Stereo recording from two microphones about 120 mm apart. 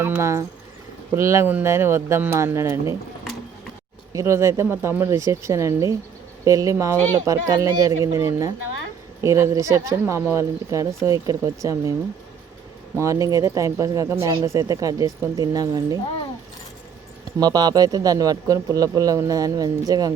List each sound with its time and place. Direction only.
0.0 s speech: 20° right (ahead or behind)
4.1 s speech: 25° right (ahead or behind)
13.0 s speech: 25° right (ahead or behind)
17.4 s a man's voice: 35° right (ahead or behind)